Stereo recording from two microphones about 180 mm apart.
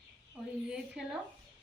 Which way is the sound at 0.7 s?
5° right (ahead or behind).